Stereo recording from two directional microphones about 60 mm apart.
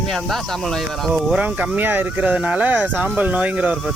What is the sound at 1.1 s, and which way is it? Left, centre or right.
Speech, centre.